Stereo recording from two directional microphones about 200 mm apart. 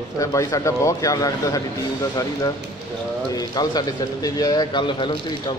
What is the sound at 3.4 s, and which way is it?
Speech, 20° left (ahead or behind).